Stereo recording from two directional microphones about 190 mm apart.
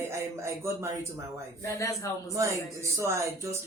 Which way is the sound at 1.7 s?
15° left (ahead or behind).